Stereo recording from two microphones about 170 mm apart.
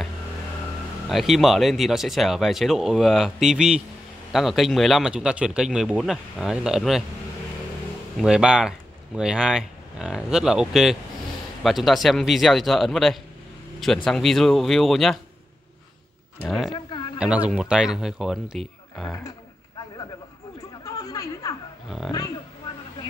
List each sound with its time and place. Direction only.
1.0 s speech: centre (ahead or behind)
8.2 s speech: 5° right (ahead or behind)
16.4 s speech: centre (ahead or behind)
16.7 s a sound: 25° left (ahead or behind)
17.2 s speech: 5° right (ahead or behind)
20.8 s chatter: 20° left (ahead or behind)
21.8 s speech: centre (ahead or behind)